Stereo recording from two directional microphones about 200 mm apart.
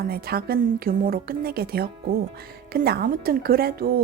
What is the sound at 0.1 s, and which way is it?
A woman's voice, 50° right (ahead or behind).